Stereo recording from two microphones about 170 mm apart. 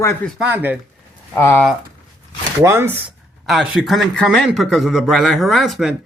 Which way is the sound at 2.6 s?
15° right (ahead or behind).